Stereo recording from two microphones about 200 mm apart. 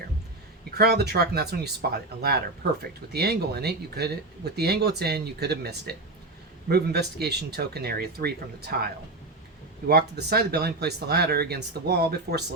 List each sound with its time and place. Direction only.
0.7 s speech: 55° right (ahead or behind)